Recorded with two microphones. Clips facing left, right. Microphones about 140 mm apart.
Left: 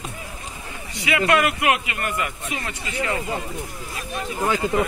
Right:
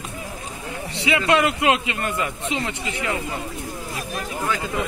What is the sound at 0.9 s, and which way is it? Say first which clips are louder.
A man's voice: even; 25° right (ahead or behind).